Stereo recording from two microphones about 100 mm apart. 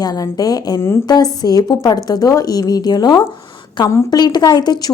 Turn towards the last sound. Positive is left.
turn(degrees=45)  # may be behind; listen again after turning